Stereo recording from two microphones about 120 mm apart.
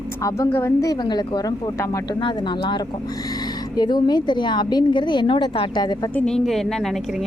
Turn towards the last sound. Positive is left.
turn(degrees=5)  # may be behind; listen again after turning